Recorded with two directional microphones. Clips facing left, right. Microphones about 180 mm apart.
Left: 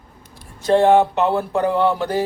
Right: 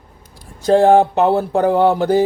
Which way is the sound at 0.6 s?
40° right (ahead or behind).